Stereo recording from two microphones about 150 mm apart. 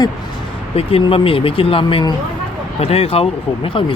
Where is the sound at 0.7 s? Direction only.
40° left (ahead or behind).